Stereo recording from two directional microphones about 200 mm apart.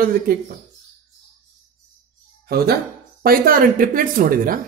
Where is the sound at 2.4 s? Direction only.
50° right (ahead or behind).